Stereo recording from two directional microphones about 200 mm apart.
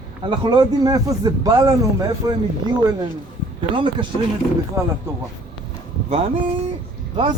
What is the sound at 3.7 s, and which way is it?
Speech, 25° right (ahead or behind).